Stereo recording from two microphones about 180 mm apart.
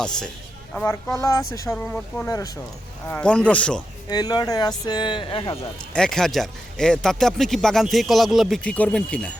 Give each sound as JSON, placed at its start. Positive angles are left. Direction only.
{"t": 0.0, "sound": "speech", "side_deg": 5}
{"t": 1.7, "sound": "speech", "side_deg": 5}
{"t": 3.1, "sound": "speech", "side_deg": 5}
{"t": 4.1, "sound": "speech", "side_deg": 20}
{"t": 5.9, "sound": "speech", "side_deg": 5}